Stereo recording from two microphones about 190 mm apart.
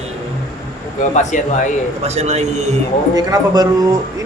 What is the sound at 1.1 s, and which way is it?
Speech, 40° left (ahead or behind).